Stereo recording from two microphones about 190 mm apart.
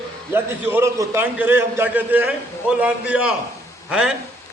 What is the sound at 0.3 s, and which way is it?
A man's voice, 10° right (ahead or behind).